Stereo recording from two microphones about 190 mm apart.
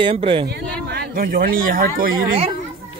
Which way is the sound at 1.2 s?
50° right (ahead or behind).